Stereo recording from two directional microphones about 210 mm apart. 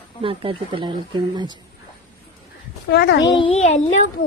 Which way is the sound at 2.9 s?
50° left (ahead or behind).